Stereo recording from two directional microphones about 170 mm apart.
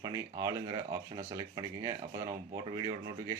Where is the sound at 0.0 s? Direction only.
20° right (ahead or behind).